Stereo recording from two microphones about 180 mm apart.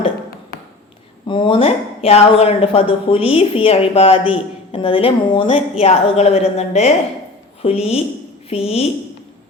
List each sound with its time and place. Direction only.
1.3 s speech: 30° left (ahead or behind)